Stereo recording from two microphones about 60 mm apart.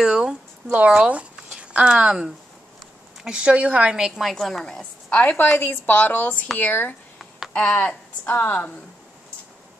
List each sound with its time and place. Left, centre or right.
0.0 s a sound: centre
0.7 s speech: right
3.3 s a woman's voice: centre
3.9 s a woman's voice: centre
5.1 s a woman's voice: left
7.2 s a sound: centre
7.5 s a woman's voice: left